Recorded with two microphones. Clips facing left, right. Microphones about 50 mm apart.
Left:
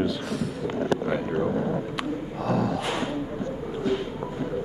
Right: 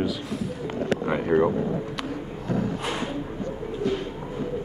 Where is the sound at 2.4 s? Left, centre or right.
Left.